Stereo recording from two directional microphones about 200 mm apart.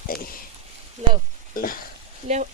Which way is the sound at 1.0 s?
35° right (ahead or behind).